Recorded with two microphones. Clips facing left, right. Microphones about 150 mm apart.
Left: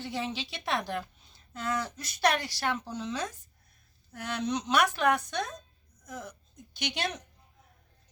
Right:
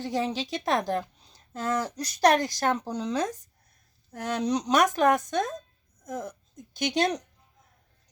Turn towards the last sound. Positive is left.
turn(degrees=-45)  # may be behind; listen again after turning